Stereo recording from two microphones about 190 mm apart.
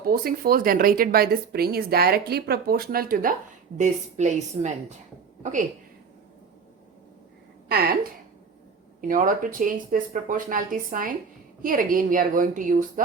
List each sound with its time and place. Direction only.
0.0 s a woman's voice: 50° right (ahead or behind)
7.7 s speech: 55° right (ahead or behind)
9.0 s speech: 45° right (ahead or behind)